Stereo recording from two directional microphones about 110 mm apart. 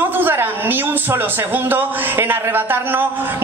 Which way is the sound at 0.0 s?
20° right (ahead or behind).